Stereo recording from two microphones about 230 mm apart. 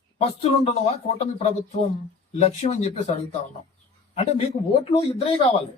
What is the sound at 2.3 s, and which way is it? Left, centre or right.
Speech, left.